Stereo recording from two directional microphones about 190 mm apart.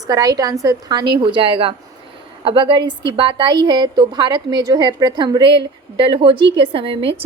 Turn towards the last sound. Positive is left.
turn(degrees=-30)  # may be behind; listen again after turning